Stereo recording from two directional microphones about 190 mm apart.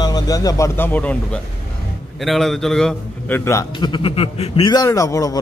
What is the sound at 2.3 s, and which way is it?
A man's voice, centre (ahead or behind).